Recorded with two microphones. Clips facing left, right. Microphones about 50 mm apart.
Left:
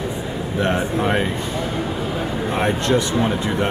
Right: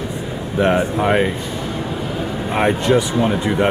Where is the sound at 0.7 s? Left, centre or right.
Centre.